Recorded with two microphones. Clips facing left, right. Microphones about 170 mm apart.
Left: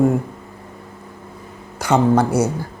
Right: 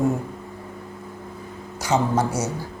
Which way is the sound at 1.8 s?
60° left (ahead or behind).